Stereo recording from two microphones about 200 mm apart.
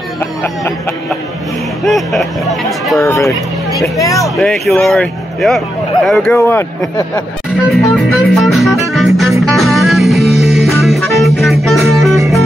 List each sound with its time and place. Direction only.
1.9 s speech: centre (ahead or behind)
3.0 s speech: 15° left (ahead or behind)
4.4 s speech: centre (ahead or behind)
7.7 s music: centre (ahead or behind)